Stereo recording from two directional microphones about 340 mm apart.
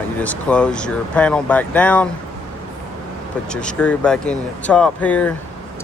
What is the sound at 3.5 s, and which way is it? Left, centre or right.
Speech, centre.